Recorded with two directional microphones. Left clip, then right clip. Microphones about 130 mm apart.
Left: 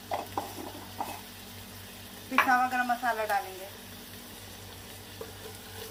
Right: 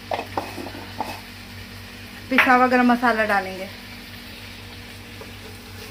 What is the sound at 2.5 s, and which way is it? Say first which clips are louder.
Speech: right 12 dB; 70° right (ahead or behind).